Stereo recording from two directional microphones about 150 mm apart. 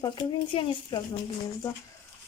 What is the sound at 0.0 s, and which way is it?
Speech, 30° left (ahead or behind).